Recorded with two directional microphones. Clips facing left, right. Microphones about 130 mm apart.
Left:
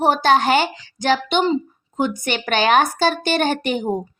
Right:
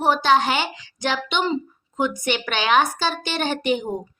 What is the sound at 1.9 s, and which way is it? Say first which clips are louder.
A woman's voice: left 1 dB; 35° left (ahead or behind).